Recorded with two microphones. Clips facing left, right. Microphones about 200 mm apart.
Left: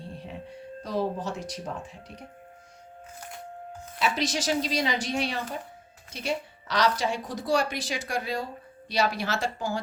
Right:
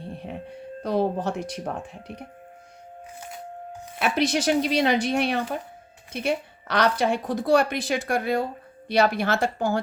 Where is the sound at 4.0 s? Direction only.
60° right (ahead or behind).